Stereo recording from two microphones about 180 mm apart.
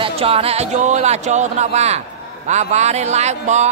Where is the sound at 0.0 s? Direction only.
35° right (ahead or behind).